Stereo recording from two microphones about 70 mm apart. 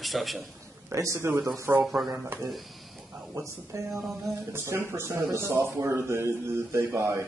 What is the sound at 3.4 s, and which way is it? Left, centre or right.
A man's voice, right.